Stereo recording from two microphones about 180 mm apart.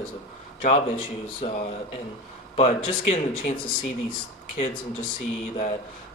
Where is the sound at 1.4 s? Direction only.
35° left (ahead or behind).